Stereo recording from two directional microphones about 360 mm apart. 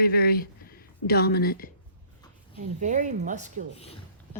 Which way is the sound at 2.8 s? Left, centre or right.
Centre.